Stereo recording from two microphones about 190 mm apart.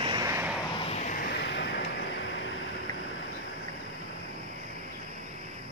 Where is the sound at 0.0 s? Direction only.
20° right (ahead or behind).